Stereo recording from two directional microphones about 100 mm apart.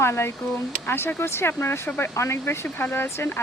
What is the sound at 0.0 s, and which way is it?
Speech, 25° left (ahead or behind).